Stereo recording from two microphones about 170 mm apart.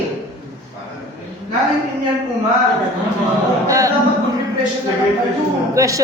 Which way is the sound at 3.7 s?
20° right (ahead or behind).